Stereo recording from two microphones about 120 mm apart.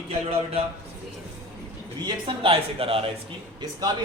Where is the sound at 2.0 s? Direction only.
45° right (ahead or behind).